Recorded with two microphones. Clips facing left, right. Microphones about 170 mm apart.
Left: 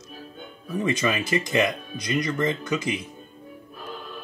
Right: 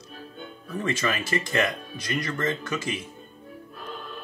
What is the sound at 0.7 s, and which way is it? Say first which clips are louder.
Speech: left 3 dB; 15° left (ahead or behind).